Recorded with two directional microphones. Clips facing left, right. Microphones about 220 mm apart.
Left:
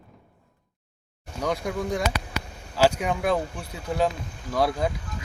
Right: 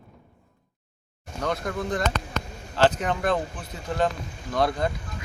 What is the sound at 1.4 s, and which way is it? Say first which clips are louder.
Speech: left 1 dB; 10° left (ahead or behind).